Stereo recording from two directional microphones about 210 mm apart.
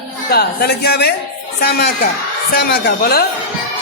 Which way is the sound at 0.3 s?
50° left (ahead or behind).